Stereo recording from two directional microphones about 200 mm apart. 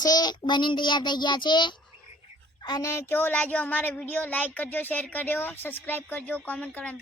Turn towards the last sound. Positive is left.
turn(degrees=5)  # may be behind; listen again after turning